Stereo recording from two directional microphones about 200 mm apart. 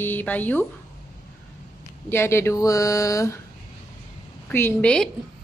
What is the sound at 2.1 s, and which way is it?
Speech, 10° left (ahead or behind).